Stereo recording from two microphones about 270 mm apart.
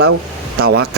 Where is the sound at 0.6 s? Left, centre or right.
Right.